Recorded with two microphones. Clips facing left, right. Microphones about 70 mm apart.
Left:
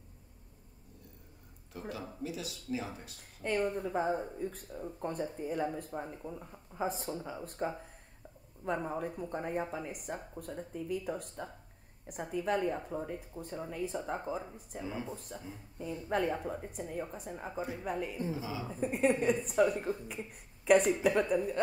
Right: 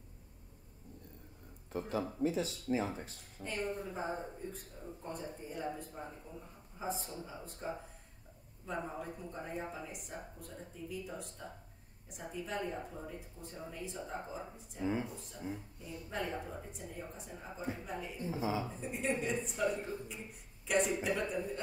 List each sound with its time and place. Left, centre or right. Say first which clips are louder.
1.7 s speech: right 5 dB; right
3.4 s a woman's voice: left 6 dB; left
15.8 s a woman's voice: left 10 dB; left
18.3 s speech: right 2 dB; right
18.7 s speech: left 7 dB; left